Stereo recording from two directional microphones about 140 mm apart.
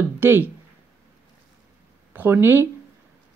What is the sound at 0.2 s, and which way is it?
Speech, 15° right (ahead or behind).